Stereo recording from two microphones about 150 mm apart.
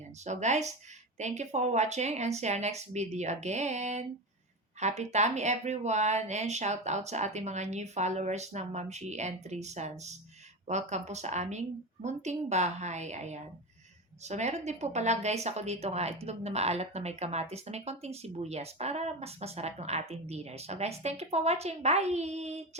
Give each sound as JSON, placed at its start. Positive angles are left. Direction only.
{"t": 0.3, "sound": "speech", "side_deg": -50}